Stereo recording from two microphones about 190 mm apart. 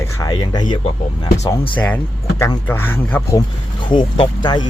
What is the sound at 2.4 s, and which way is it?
Speech, 15° left (ahead or behind).